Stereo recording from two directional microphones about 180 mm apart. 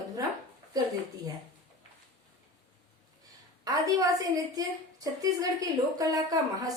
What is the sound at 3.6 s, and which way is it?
A woman's voice, 20° right (ahead or behind).